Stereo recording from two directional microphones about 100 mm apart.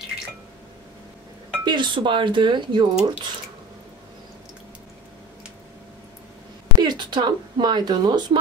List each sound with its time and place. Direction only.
1.6 s speech: 50° right (ahead or behind)
6.8 s speech: 45° right (ahead or behind)